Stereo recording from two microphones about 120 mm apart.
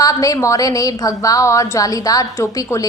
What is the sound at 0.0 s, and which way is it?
A woman's voice, 30° left (ahead or behind).